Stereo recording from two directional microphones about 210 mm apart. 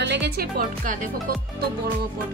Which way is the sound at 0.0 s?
55° right (ahead or behind).